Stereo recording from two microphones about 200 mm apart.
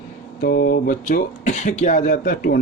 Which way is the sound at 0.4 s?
45° left (ahead or behind).